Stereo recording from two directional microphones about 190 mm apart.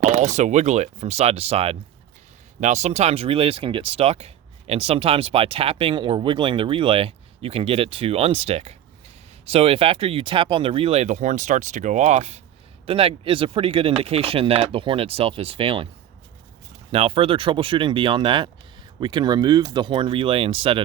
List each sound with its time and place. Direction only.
0.0 s speech: 40° right (ahead or behind)
16.9 s speech: 30° right (ahead or behind)